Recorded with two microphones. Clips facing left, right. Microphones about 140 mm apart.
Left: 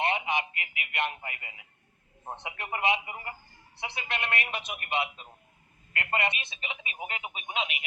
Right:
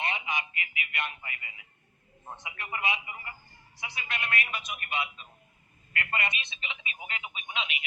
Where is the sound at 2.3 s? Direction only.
60° left (ahead or behind); by 3.3 s 45° left (ahead or behind).